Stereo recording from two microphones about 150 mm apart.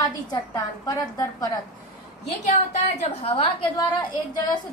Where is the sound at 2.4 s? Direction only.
50° left (ahead or behind).